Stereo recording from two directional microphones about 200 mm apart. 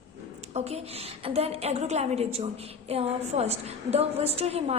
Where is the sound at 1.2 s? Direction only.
30° right (ahead or behind).